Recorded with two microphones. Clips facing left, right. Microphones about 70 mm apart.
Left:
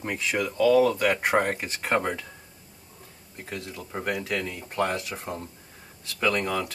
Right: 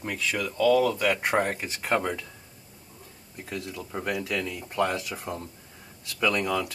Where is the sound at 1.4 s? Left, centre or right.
Left.